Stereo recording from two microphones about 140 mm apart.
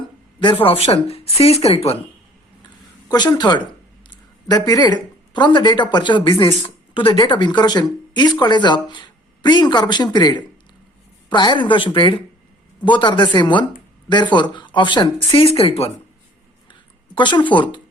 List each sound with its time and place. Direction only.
0.6 s speech: 40° left (ahead or behind)
3.1 s a woman's voice: 30° left (ahead or behind)
15.5 s speech: 45° left (ahead or behind)
17.2 s speech: 35° left (ahead or behind)